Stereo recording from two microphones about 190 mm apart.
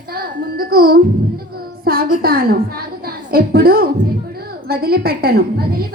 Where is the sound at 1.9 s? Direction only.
50° right (ahead or behind).